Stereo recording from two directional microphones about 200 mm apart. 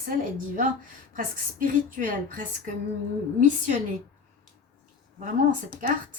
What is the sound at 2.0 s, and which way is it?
Speech, 40° right (ahead or behind).